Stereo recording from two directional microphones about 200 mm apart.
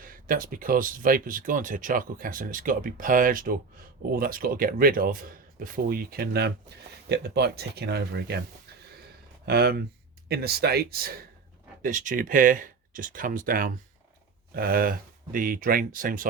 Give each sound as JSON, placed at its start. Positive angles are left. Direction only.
{"t": 0.0, "sound": "speech", "side_deg": -45}
{"t": 9.5, "sound": "speech", "side_deg": -55}